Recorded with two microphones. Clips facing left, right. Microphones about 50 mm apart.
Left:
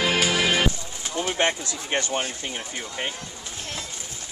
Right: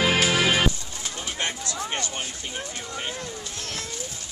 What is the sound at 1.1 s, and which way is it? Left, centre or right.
Bird, left.